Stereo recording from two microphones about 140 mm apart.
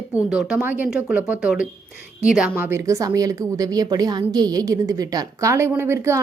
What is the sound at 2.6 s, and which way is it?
A woman's voice, 15° right (ahead or behind).